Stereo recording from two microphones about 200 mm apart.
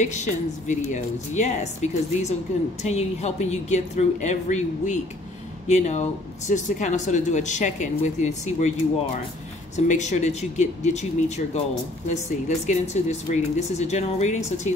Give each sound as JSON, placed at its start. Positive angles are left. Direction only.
{"t": 0.0, "sound": "speech", "side_deg": 35}
{"t": 9.8, "sound": "speech", "side_deg": 35}